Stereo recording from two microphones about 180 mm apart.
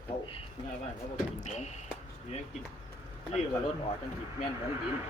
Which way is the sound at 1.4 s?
40° left (ahead or behind).